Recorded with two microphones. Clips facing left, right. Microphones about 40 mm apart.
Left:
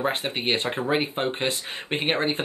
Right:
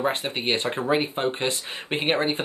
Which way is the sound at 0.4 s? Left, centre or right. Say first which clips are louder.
Even; centre.